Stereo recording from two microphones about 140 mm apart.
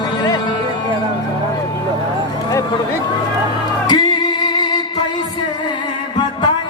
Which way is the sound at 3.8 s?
30° left (ahead or behind).